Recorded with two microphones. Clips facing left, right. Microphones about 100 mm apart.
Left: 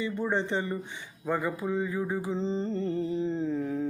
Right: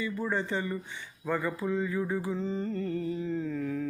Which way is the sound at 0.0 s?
25° left (ahead or behind).